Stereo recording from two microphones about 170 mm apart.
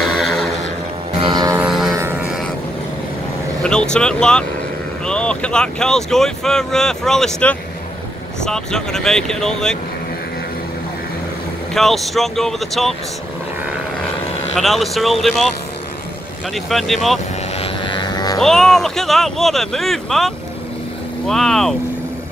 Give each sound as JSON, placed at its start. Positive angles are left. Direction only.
{"t": 0.2, "sound": "vehicle", "side_deg": 5}
{"t": 1.2, "sound": "music", "side_deg": -25}
{"t": 1.6, "sound": "a sound", "side_deg": 0}
{"t": 3.6, "sound": "speech", "side_deg": 5}
{"t": 11.7, "sound": "speech", "side_deg": 0}
{"t": 14.6, "sound": "speech", "side_deg": 0}
{"t": 16.5, "sound": "speech", "side_deg": 0}
{"t": 17.6, "sound": "vehicle", "side_deg": 30}
{"t": 18.4, "sound": "speech", "side_deg": 0}